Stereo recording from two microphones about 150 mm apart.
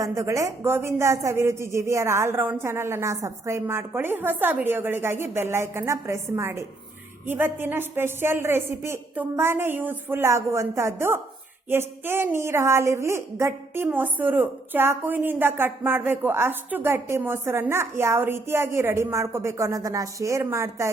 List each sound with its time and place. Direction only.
0.0 s a woman's voice: 20° right (ahead or behind)